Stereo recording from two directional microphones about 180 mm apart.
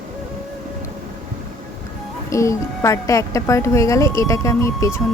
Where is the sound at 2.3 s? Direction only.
15° left (ahead or behind).